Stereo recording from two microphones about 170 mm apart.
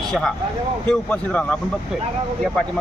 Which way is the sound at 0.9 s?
5° left (ahead or behind).